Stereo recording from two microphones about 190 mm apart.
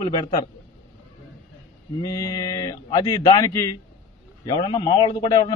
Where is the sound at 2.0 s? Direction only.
20° left (ahead or behind).